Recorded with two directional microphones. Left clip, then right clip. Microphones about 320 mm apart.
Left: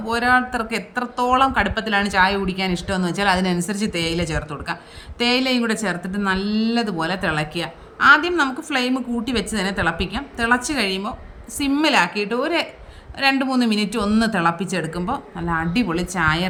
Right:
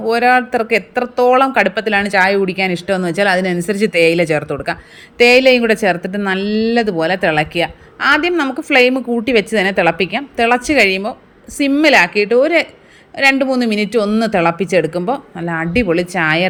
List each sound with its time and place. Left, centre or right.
0.0 s speech: centre